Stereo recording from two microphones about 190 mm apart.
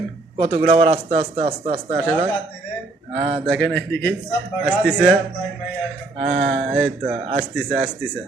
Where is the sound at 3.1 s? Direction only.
30° right (ahead or behind).